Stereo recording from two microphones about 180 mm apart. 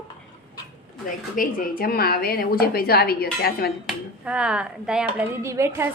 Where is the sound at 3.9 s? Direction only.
5° right (ahead or behind).